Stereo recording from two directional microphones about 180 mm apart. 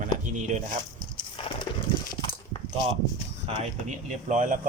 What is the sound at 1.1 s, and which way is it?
Horse, 25° left (ahead or behind).